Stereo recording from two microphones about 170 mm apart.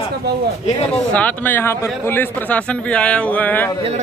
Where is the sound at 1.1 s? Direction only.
10° left (ahead or behind).